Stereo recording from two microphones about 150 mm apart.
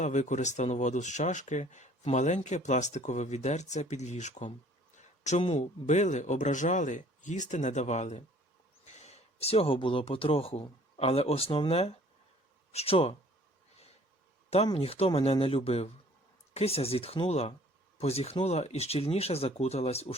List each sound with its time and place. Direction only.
0.0 s speech: 50° left (ahead or behind)
14.7 s speech: 40° left (ahead or behind)